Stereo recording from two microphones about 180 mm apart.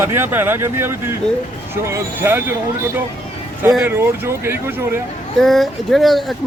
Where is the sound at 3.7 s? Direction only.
10° right (ahead or behind).